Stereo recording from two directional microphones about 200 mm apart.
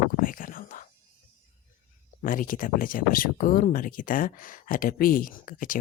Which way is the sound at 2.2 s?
45° left (ahead or behind).